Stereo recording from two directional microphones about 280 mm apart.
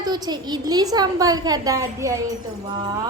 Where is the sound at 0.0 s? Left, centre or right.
Centre.